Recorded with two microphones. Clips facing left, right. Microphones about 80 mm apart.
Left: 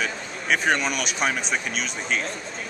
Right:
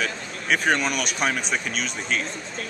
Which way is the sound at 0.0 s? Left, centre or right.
Centre.